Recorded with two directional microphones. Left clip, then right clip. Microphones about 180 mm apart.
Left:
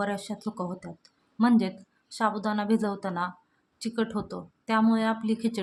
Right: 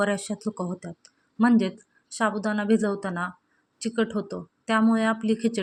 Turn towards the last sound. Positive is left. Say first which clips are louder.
# right 4 dB
turn(degrees=-10)  # may be behind; listen again after turning